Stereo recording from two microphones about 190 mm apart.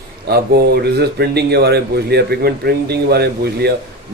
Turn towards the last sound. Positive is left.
turn(degrees=-60)  # may be behind; listen again after turning